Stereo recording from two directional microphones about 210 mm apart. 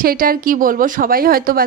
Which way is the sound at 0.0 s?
45° right (ahead or behind).